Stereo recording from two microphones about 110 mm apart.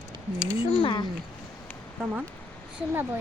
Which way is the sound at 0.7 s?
55° left (ahead or behind).